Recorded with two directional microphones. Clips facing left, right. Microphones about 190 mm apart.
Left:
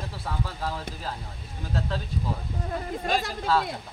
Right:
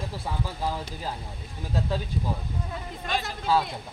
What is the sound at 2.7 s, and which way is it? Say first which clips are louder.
Speech: left 5 dB; 40° left (ahead or behind).